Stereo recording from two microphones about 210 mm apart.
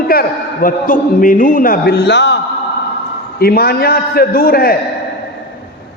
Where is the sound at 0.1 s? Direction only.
45° left (ahead or behind).